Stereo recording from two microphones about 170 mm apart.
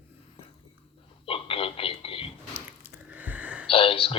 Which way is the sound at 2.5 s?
10° right (ahead or behind).